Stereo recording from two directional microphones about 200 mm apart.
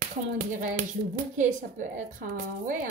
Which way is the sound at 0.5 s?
40° right (ahead or behind).